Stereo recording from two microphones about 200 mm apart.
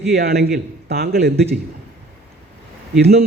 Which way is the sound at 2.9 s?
50° right (ahead or behind).